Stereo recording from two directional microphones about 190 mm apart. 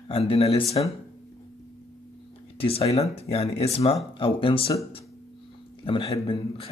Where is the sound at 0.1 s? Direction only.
30° left (ahead or behind).